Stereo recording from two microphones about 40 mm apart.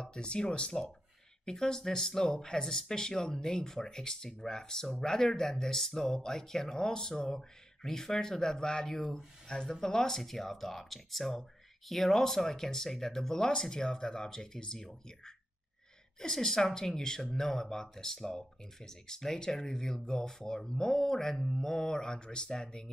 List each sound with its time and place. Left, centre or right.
0.0 s speech: left